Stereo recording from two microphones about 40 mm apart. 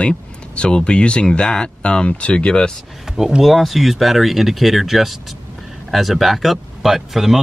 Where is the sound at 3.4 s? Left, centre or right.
Centre.